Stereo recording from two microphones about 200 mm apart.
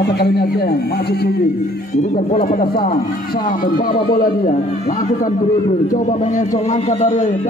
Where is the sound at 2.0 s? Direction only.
40° left (ahead or behind).